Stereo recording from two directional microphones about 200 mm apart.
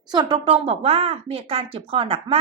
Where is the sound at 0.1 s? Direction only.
25° right (ahead or behind).